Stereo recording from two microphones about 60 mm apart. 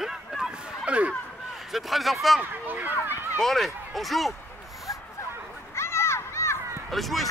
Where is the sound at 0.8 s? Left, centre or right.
Right.